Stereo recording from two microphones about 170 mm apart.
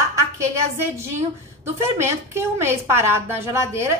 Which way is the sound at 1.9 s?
15° right (ahead or behind).